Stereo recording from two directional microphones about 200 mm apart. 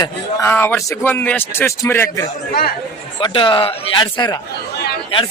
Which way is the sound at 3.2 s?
25° left (ahead or behind).